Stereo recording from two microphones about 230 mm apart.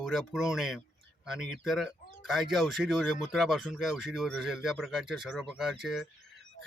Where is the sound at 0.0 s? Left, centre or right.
Centre.